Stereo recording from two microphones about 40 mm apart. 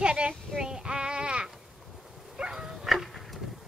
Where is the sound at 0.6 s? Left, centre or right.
Centre.